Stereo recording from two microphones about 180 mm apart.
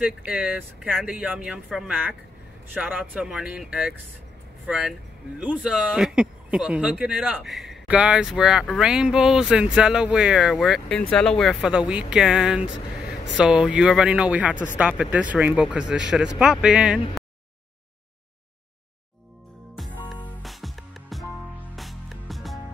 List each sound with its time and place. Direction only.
0.0 s speech: 10° right (ahead or behind)
19.8 s music: 5° left (ahead or behind)